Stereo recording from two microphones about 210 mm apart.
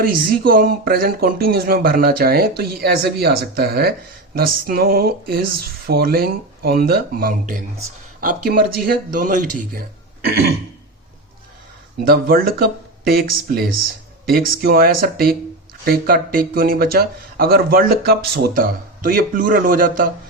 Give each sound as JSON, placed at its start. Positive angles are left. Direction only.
{"t": 0.0, "sound": "speech", "side_deg": -45}
{"t": 11.9, "sound": "speech", "side_deg": -50}